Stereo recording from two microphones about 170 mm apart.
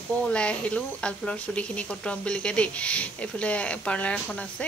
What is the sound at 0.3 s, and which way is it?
Speech, 5° left (ahead or behind).